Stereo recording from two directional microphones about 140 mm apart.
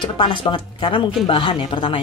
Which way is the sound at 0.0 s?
35° left (ahead or behind).